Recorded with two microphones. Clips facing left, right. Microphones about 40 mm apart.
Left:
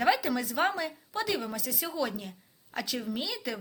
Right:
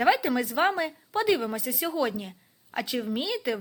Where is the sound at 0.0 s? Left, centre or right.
Centre.